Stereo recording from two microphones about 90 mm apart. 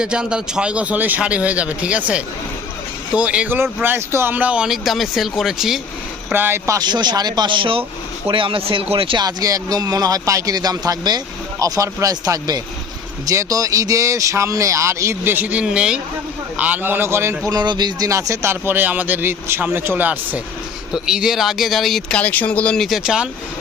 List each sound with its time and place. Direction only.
0.0 s a man's voice: 10° right (ahead or behind)
6.3 s speech: 25° right (ahead or behind)
6.7 s speech: 50° right (ahead or behind); by 9.1 s 90° right
9.1 s speech: 45° right (ahead or behind); by 15.6 s 20° right (ahead or behind)
15.6 s a man's voice: 10° right (ahead or behind); by 17.3 s 30° right (ahead or behind)
17.5 s speech: 50° right (ahead or behind)
18.1 s speech: 35° right (ahead or behind)
18.6 s speech: 20° right (ahead or behind)
20.9 s speech: 5° right (ahead or behind)
22.2 s speech: 20° left (ahead or behind)
22.8 s a man's voice: 5° right (ahead or behind)